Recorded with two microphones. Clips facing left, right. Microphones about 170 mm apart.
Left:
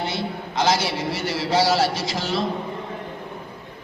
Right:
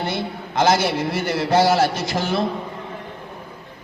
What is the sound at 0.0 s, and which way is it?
A man's voice, 55° right (ahead or behind).